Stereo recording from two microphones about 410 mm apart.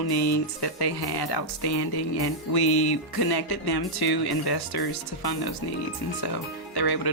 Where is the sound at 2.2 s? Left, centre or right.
Left.